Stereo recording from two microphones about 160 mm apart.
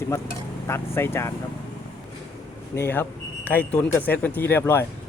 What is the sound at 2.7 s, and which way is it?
Speech, 15° left (ahead or behind).